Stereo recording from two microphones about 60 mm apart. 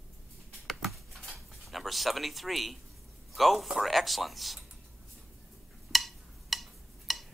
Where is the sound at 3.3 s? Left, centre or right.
Centre.